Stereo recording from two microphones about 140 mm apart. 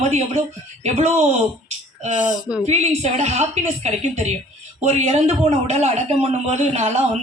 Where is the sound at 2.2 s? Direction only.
30° right (ahead or behind).